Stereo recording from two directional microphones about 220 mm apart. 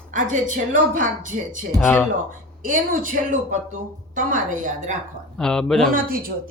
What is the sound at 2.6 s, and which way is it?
A woman's voice, 35° right (ahead or behind).